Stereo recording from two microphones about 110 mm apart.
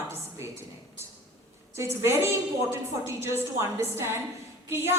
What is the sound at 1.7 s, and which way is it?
A woman's voice, 20° right (ahead or behind).